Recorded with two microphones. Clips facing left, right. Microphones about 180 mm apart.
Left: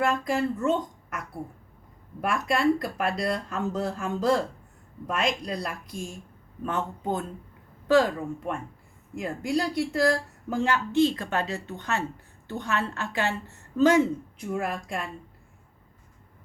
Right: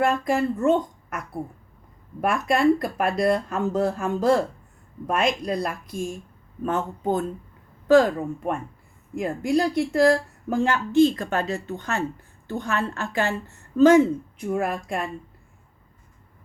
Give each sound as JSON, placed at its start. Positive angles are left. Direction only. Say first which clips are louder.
{"t": 0.0, "sound": "speech", "louder": "right 3 dB", "side_deg": -50}
{"t": 2.2, "sound": "speech", "louder": "right 4 dB", "side_deg": -50}